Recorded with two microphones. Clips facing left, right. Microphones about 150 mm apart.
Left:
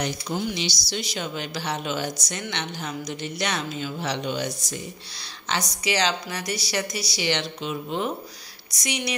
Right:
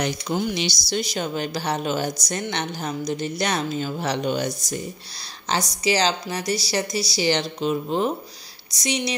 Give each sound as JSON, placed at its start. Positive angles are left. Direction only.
{"t": 0.0, "sound": "a woman's voice", "side_deg": -55}
{"t": 5.5, "sound": "a woman's voice", "side_deg": -35}